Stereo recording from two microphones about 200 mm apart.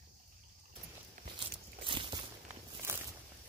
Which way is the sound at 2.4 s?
10° right (ahead or behind).